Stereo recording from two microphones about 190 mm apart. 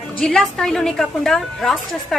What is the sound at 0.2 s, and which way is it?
A woman's voice, 5° left (ahead or behind).